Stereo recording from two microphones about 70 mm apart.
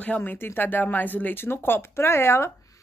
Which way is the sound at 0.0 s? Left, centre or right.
Left.